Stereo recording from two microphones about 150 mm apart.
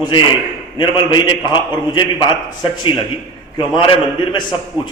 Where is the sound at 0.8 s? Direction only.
30° left (ahead or behind).